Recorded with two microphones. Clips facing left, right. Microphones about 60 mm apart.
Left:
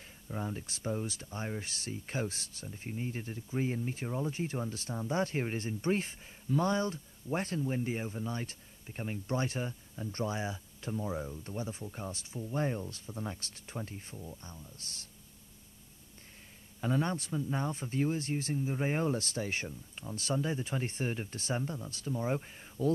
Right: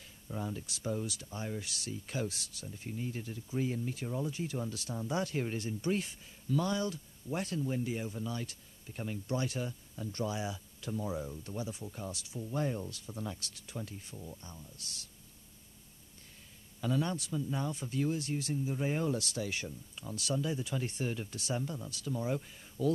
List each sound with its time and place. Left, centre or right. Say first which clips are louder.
0.0 s speech: left 1 dB; left
16.8 s speech: left 1 dB; left